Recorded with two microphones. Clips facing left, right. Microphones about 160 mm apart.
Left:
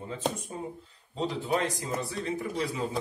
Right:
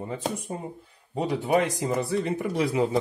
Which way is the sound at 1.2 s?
60° right (ahead or behind).